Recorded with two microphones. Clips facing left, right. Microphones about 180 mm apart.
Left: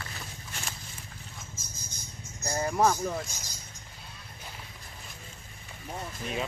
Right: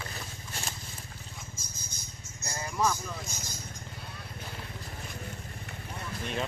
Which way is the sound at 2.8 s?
55° left (ahead or behind).